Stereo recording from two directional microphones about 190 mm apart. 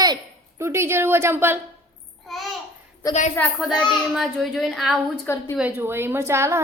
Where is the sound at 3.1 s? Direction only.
40° left (ahead or behind).